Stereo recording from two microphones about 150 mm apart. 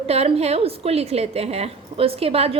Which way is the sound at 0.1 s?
45° right (ahead or behind).